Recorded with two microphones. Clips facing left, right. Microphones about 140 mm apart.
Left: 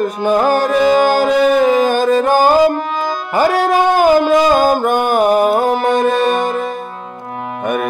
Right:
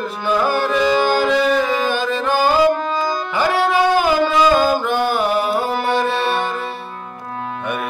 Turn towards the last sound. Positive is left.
turn(degrees=40)  # may be behind; listen again after turning